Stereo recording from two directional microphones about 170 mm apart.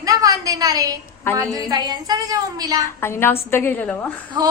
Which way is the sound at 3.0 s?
15° left (ahead or behind).